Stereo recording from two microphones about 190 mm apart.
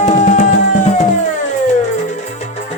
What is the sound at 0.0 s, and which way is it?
Music, 40° left (ahead or behind).